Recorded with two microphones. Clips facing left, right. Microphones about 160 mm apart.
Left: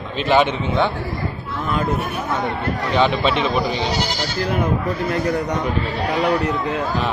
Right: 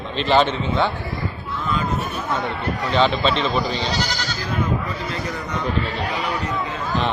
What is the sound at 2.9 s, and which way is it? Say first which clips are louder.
A man's voice: left 1 dB; 15° left (ahead or behind).